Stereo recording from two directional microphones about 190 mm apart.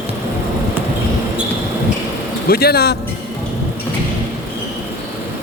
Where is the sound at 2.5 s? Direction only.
55° left (ahead or behind).